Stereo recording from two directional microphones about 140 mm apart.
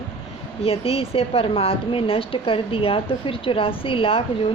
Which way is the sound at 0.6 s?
45° left (ahead or behind).